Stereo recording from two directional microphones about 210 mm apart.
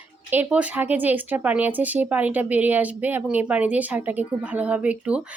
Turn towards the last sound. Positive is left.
turn(degrees=-5)  # may be behind; listen again after turning